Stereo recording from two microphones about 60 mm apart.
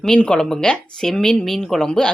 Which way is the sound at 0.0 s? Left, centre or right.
Centre.